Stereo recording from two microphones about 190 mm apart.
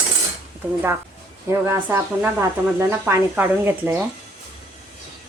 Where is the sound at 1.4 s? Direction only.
15° right (ahead or behind).